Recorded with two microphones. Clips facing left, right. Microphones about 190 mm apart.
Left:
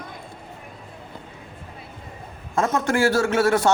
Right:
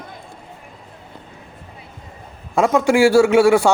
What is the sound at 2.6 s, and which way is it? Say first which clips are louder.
Speech: right 6 dB; 90° right.